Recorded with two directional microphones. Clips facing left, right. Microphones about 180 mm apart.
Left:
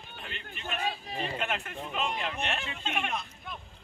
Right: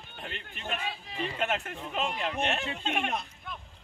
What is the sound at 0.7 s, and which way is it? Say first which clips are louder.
Speech: left 3 dB; 40° left (ahead or behind).